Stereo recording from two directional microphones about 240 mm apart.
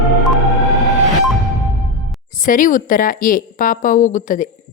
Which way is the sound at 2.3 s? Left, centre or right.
Left.